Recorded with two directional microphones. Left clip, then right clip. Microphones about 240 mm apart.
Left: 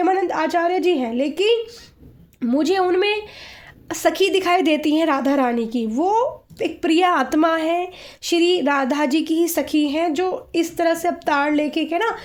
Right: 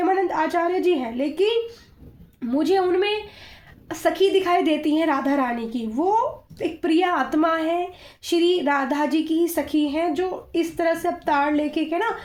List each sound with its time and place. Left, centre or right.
0.0 s a woman's voice: left